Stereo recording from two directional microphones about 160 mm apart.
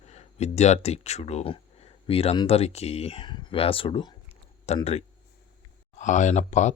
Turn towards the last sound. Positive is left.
turn(degrees=45)  # may be behind; listen again after turning